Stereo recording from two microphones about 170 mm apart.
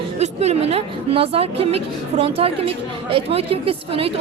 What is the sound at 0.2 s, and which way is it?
A woman's voice, 40° right (ahead or behind).